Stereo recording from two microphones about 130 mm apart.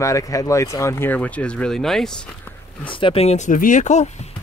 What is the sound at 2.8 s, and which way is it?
Speech, 45° left (ahead or behind).